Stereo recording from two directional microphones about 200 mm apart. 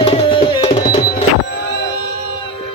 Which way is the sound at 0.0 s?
30° left (ahead or behind).